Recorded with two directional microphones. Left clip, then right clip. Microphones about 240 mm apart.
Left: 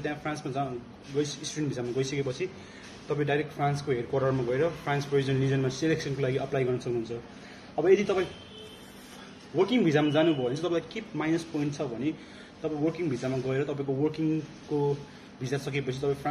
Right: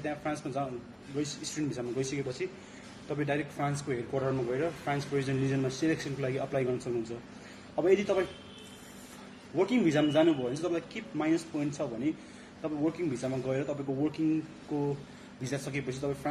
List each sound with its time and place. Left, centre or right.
0.0 s a man's voice: centre
9.6 s a man's voice: centre
15.4 s a man's voice: centre